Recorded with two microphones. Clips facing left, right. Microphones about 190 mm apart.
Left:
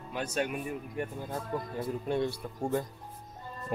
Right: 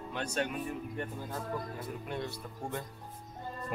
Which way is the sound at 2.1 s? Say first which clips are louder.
Left 9 dB; 30° left (ahead or behind).